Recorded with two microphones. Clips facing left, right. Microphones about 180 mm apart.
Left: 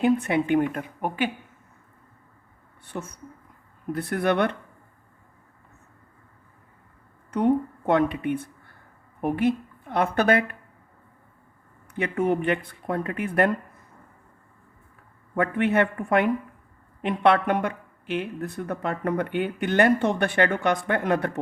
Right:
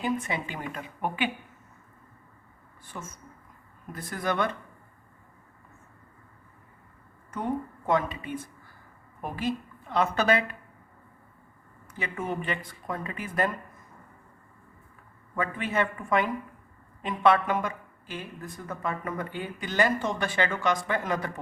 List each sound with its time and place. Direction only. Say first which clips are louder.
0.0 s speech: left 8 dB; 60° left (ahead or behind); by 1.3 s 45° left (ahead or behind)
2.8 s speech: left 7 dB; 65° left (ahead or behind)
7.3 s a woman's voice: left 9 dB; 70° left (ahead or behind)
11.9 s speech: left 9 dB; 65° left (ahead or behind)
15.4 s speech: left 7 dB; 60° left (ahead or behind)